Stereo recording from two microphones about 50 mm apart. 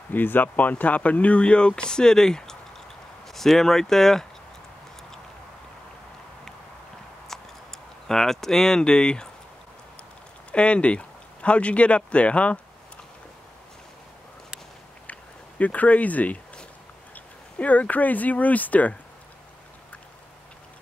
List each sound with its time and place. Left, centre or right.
0.1 s speech: left; by 4.3 s centre
7.2 s tick: centre
10.5 s speech: left
15.6 s speech: left